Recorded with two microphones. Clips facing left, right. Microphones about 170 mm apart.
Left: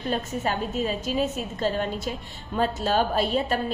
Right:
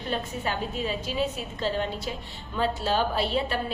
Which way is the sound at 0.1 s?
45° left (ahead or behind).